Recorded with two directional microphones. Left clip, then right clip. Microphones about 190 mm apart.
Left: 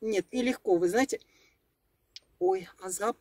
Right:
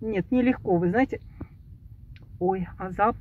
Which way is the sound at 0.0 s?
25° left (ahead or behind).